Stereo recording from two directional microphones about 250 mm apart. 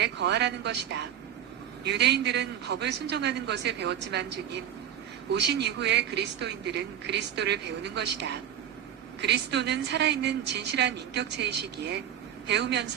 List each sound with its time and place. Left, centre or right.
0.0 s speech: right